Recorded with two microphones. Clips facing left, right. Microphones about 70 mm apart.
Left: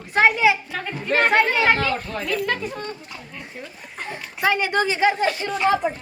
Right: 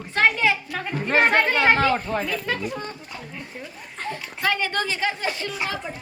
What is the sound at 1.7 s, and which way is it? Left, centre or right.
Speech, right.